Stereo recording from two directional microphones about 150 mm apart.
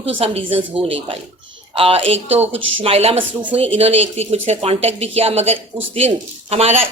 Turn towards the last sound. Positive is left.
turn(degrees=-40)  # may be behind; listen again after turning